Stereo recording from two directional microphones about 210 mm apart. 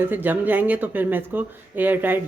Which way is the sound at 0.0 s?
10° right (ahead or behind).